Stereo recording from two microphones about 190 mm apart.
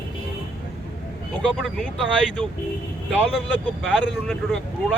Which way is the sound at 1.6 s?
Centre (ahead or behind).